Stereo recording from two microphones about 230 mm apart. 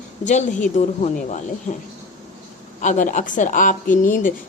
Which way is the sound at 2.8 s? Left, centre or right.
Left.